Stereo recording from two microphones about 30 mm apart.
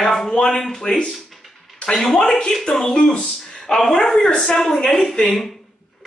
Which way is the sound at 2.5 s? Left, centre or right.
Centre.